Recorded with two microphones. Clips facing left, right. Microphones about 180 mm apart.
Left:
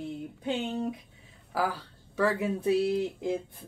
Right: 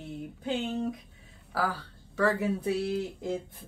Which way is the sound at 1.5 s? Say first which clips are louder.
Left 1 dB; 15° left (ahead or behind).